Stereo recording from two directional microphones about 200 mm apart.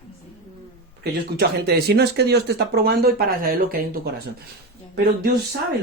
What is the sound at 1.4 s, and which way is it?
Speech, 55° right (ahead or behind).